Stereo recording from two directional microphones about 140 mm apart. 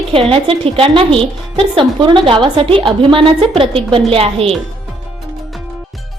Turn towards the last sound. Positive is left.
turn(degrees=-45)  # may be behind; listen again after turning